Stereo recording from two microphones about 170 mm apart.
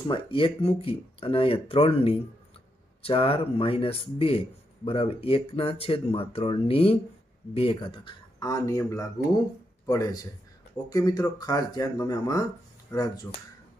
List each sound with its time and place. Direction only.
0.1 s speech: 30° left (ahead or behind)